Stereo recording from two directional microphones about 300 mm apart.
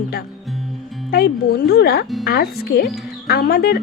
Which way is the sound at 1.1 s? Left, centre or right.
Left.